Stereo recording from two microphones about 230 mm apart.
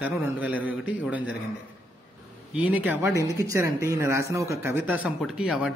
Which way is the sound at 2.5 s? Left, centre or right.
Centre.